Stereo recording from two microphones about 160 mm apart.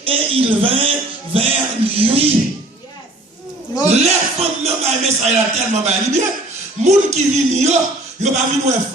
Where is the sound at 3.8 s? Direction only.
45° right (ahead or behind).